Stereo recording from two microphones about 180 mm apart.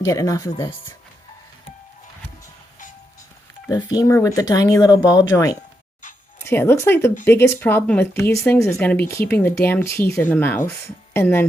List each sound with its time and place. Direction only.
0.0 s speech: 20° left (ahead or behind)
3.7 s speech: 20° left (ahead or behind)